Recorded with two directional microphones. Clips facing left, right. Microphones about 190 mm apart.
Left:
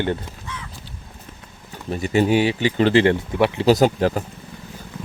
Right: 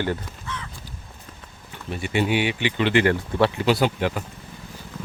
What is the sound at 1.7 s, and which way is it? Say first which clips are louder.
Speech: left 5 dB; 40° left (ahead or behind).